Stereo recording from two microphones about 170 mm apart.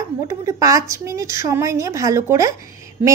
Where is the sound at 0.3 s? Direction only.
20° right (ahead or behind).